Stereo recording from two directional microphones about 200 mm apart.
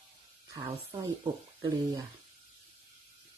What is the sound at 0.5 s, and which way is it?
Speech, 25° right (ahead or behind).